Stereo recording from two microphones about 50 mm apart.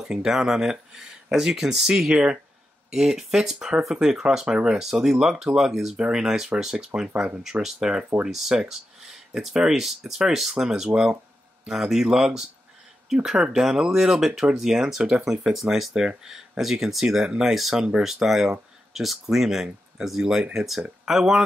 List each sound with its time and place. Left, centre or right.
0.0 s speech: centre